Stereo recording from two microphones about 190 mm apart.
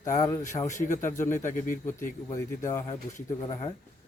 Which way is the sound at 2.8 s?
35° left (ahead or behind).